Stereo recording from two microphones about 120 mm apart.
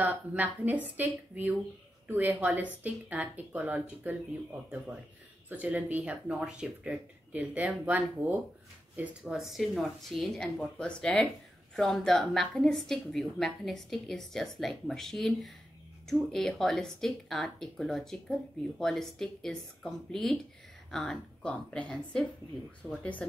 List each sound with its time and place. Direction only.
0.0 s a woman's voice: 15° right (ahead or behind); by 23.0 s 10° left (ahead or behind)